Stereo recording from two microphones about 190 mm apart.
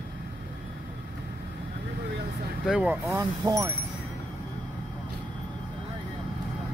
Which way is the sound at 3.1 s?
15° right (ahead or behind).